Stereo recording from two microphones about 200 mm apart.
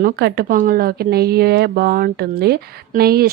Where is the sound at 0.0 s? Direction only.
50° right (ahead or behind).